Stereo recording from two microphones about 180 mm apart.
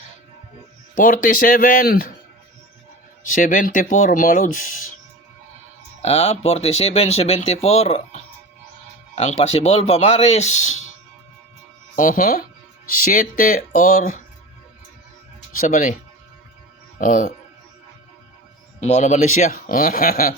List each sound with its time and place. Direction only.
0.9 s speech: 50° left (ahead or behind)
3.2 s speech: 45° left (ahead or behind)
6.0 s speech: 35° left (ahead or behind)
11.9 s speech: 45° left (ahead or behind)
15.5 s speech: 45° left (ahead or behind)
17.0 s speech: 45° left (ahead or behind)
18.8 s speech: 40° left (ahead or behind)